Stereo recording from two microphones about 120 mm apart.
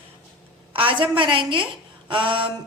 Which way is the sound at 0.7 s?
45° right (ahead or behind).